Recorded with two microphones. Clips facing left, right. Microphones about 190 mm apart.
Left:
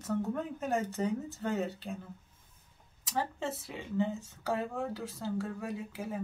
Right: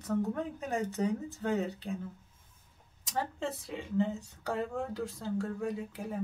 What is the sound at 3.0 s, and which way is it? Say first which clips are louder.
Speech: even; centre (ahead or behind).